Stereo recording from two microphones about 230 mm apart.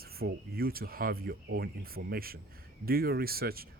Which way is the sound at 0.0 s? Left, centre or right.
Right.